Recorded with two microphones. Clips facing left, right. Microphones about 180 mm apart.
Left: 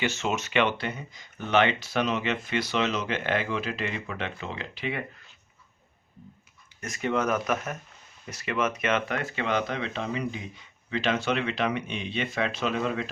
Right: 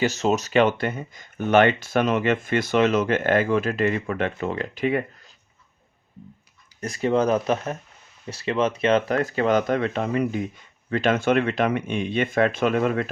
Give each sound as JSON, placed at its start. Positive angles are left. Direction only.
{"t": 0.0, "sound": "speech", "side_deg": -40}
{"t": 6.7, "sound": "speech", "side_deg": -35}